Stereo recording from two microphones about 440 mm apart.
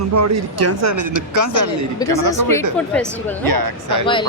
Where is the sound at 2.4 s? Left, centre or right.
Centre.